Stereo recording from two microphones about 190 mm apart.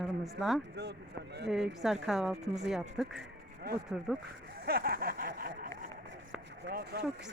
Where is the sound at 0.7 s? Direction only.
60° right (ahead or behind).